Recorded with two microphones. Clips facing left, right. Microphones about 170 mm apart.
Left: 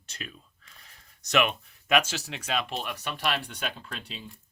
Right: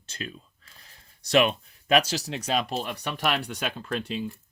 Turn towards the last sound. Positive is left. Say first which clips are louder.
# right 10 dB
turn(degrees=-50)  # may be behind; listen again after turning